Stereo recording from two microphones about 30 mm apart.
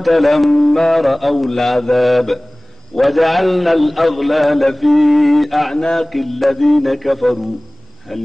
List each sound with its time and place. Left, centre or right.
0.0 s mantra: centre
8.1 s speech: centre